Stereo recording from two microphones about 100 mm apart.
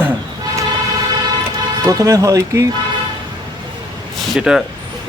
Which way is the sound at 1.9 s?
35° right (ahead or behind).